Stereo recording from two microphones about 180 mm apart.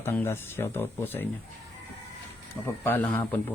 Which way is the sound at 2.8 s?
10° left (ahead or behind).